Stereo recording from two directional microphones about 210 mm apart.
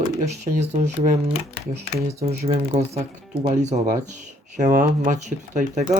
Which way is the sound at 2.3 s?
30° right (ahead or behind).